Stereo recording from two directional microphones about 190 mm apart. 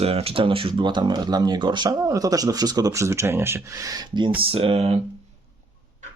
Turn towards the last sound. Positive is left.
turn(degrees=-30)  # may be behind; listen again after turning